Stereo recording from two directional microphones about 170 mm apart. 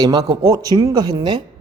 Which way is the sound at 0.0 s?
25° right (ahead or behind).